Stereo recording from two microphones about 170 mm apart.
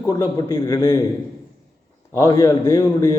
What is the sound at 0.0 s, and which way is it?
A man's voice, 20° left (ahead or behind).